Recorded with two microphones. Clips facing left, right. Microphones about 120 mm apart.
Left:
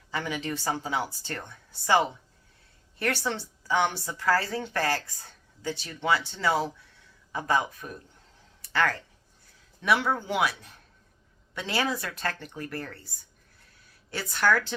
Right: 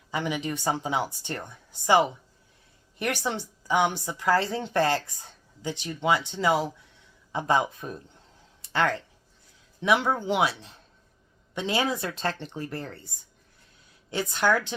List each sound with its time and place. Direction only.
0.1 s a woman's voice: 15° right (ahead or behind)